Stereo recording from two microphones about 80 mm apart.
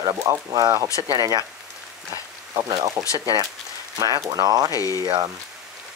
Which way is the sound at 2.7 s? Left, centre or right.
Right.